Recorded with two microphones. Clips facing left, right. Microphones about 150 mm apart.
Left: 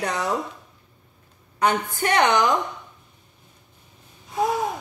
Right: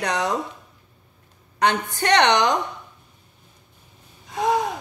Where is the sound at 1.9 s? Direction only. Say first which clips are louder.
Right 2 dB; 80° right.